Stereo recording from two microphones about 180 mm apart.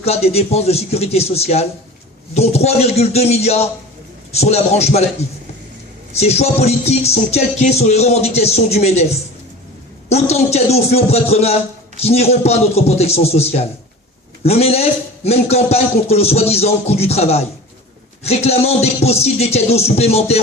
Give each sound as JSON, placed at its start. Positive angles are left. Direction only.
{"t": 0.0, "sound": "a man's voice", "side_deg": 35}
{"t": 6.1, "sound": "a man's voice", "side_deg": 35}
{"t": 10.1, "sound": "a man's voice", "side_deg": 35}